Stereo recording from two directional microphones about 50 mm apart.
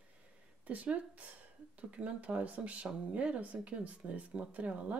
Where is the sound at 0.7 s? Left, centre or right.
Right.